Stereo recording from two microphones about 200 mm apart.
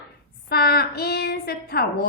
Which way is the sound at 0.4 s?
50° left (ahead or behind).